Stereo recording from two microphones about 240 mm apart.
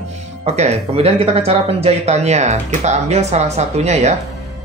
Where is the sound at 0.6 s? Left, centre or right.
Right.